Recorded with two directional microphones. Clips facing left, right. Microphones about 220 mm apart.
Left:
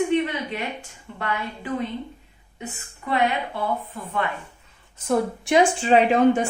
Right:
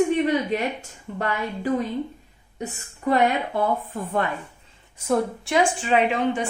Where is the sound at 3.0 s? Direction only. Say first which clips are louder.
Right 3 dB; 45° right (ahead or behind).